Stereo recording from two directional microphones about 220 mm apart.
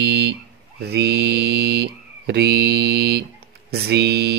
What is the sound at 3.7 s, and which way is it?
Speech, 50° right (ahead or behind).